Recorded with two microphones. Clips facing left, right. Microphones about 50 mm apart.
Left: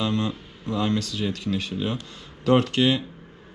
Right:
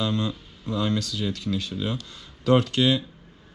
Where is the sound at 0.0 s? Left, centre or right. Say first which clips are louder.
Left 1 dB; left.